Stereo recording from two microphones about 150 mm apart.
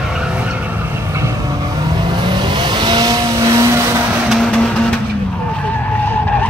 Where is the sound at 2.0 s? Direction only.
30° right (ahead or behind).